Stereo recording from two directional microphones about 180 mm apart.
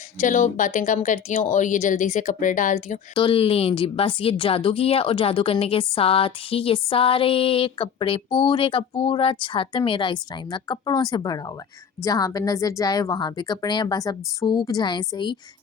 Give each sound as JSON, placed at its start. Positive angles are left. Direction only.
{"t": 0.2, "sound": "speech", "side_deg": 45}
{"t": 3.2, "sound": "a woman's voice", "side_deg": 30}